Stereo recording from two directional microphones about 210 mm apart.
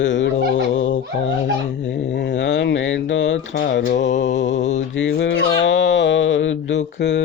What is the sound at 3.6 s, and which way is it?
Music, 50° left (ahead or behind).